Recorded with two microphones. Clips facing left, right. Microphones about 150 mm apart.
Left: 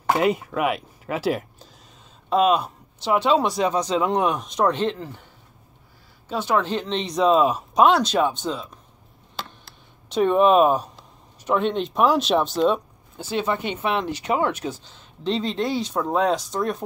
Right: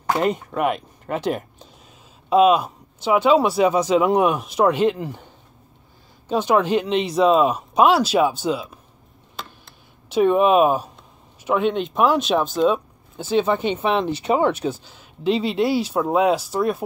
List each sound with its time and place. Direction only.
0.1 s speech: 5° left (ahead or behind); by 5.2 s 15° right (ahead or behind)
6.2 s speech: 15° right (ahead or behind)
10.0 s speech: 5° right (ahead or behind)
13.4 s speech: 25° right (ahead or behind)
14.9 s speech: 10° right (ahead or behind)